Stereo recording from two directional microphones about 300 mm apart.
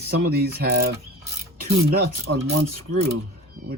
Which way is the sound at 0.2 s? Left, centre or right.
Right.